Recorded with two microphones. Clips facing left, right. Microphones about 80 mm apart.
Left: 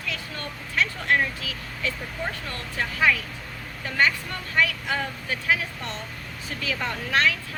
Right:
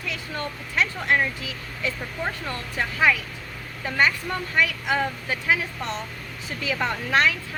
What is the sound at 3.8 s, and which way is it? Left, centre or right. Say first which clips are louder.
Speech: right 1 dB; right.